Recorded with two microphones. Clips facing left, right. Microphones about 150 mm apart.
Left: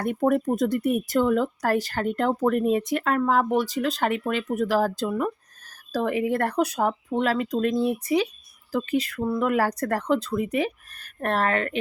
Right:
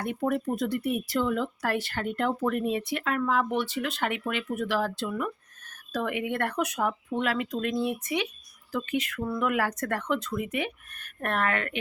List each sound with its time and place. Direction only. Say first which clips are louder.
0.0 s speech: left 6 dB; 45° left (ahead or behind)